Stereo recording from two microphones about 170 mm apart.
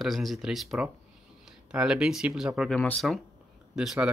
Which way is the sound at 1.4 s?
5° right (ahead or behind).